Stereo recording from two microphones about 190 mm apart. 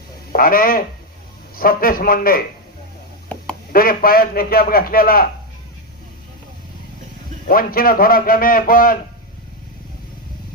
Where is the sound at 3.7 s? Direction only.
50° left (ahead or behind).